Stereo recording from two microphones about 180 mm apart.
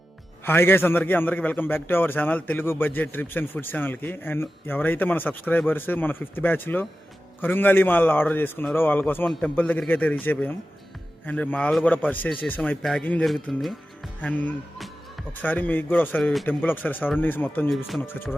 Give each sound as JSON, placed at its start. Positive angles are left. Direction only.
{"t": 0.4, "sound": "a man's voice", "side_deg": 10}